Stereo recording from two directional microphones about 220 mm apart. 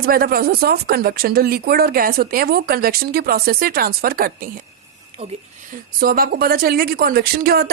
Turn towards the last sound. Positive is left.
turn(degrees=-45)  # may be behind; listen again after turning